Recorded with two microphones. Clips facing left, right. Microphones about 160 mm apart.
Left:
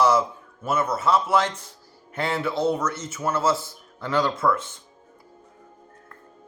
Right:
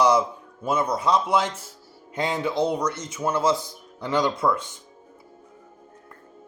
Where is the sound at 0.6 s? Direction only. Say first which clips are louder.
Even; 15° right (ahead or behind).